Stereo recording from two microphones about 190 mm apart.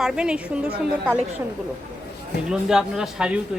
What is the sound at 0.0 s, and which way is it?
Speech, 5° right (ahead or behind).